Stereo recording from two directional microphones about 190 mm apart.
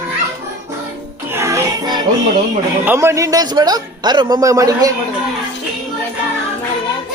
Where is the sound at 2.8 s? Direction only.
10° right (ahead or behind).